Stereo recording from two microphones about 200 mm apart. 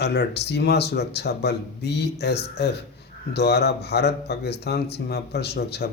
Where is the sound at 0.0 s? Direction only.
55° left (ahead or behind).